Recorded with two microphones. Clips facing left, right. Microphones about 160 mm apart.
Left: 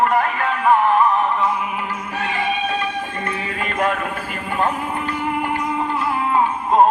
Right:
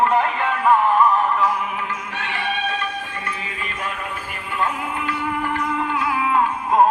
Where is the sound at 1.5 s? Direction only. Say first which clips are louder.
Left 1 dB; centre (ahead or behind).